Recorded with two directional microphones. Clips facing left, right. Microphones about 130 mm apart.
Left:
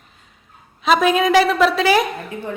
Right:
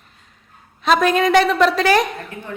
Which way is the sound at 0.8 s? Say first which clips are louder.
Even; centre (ahead or behind).